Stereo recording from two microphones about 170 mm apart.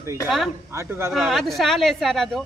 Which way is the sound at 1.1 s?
Centre (ahead or behind).